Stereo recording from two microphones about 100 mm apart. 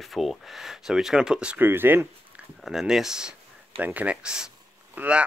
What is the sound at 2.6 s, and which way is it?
Speech, 5° right (ahead or behind).